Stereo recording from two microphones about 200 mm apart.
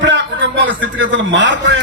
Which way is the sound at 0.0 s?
65° right (ahead or behind).